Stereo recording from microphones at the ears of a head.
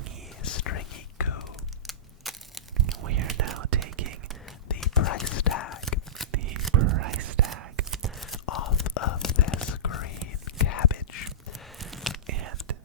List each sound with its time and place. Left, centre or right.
0.4 s whispering: left
3.0 s whispering: right
4.7 s whispering: left
6.3 s whispering: right
8.4 s whispering: left
12.2 s whispering: right